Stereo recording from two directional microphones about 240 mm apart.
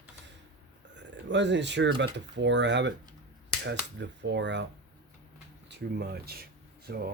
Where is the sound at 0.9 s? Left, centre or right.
Right.